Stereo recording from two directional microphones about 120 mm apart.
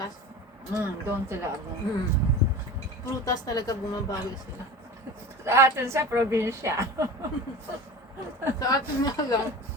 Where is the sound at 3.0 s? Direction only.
30° left (ahead or behind).